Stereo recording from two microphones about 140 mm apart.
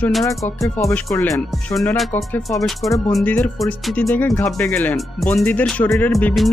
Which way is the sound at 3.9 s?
10° left (ahead or behind).